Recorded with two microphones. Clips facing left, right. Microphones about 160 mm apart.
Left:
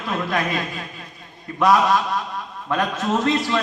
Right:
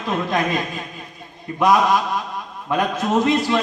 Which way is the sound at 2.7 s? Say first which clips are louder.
Right 2 dB; 15° right (ahead or behind).